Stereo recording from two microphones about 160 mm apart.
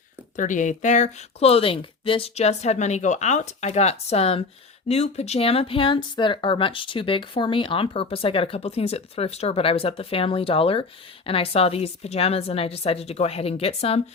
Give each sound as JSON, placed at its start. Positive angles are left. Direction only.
{"t": 0.3, "sound": "speech", "side_deg": 50}